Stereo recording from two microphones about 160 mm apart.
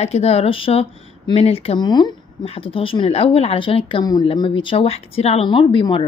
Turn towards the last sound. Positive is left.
turn(degrees=30)  # may be behind; listen again after turning